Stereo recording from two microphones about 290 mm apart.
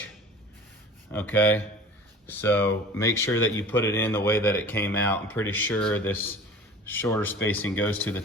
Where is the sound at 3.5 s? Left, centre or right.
Centre.